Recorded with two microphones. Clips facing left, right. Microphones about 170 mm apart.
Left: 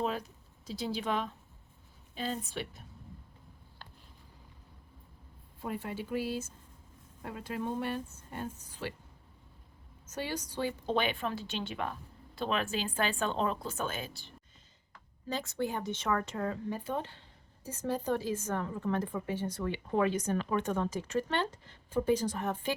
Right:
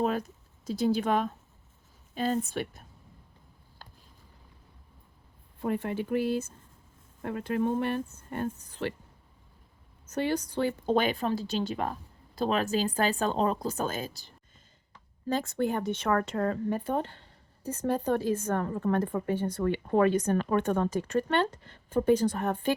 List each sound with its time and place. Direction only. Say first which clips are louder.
0.0 s speech: right 5 dB; 50° right (ahead or behind)
5.6 s speech: right 7 dB; 60° right (ahead or behind)
10.1 s speech: right 8 dB; 60° right (ahead or behind); by 14.3 s 40° right (ahead or behind)
15.3 s speech: right 6 dB; 55° right (ahead or behind)